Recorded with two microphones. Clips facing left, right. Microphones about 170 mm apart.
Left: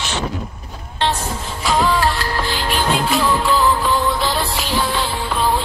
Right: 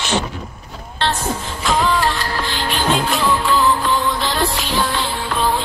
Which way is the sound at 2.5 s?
Centre (ahead or behind).